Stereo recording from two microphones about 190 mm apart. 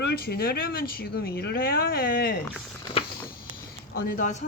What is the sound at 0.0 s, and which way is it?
A woman's voice, 55° left (ahead or behind).